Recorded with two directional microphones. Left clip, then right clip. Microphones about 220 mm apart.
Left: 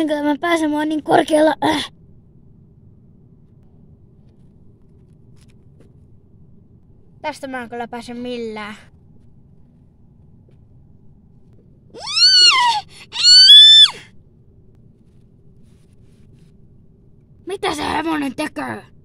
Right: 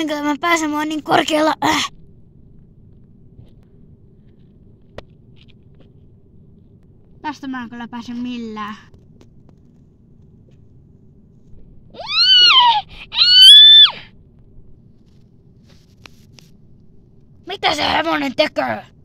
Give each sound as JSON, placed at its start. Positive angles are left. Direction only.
{"t": 0.0, "sound": "speech", "side_deg": -5}
{"t": 8.1, "sound": "speech", "side_deg": 40}
{"t": 12.0, "sound": "a sound", "side_deg": 15}
{"t": 13.5, "sound": "screaming", "side_deg": 15}
{"t": 17.5, "sound": "a woman's voice", "side_deg": 10}